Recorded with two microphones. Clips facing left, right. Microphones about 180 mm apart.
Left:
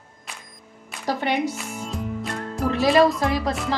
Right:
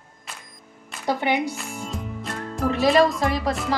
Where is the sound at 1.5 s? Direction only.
5° left (ahead or behind).